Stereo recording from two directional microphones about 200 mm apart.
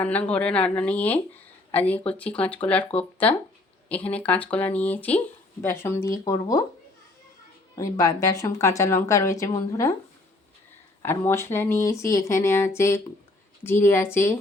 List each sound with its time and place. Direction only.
0.0 s speech: 10° left (ahead or behind)
7.8 s speech: 15° left (ahead or behind)
11.0 s speech: 10° left (ahead or behind)